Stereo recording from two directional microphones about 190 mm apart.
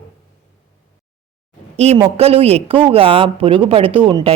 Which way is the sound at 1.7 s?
35° right (ahead or behind).